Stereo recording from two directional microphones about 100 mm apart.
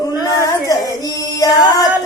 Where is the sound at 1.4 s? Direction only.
40° left (ahead or behind).